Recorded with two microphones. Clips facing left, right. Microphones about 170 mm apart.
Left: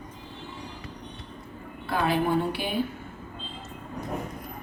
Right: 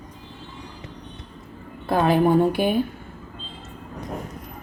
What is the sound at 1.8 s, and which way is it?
Speech, 50° right (ahead or behind).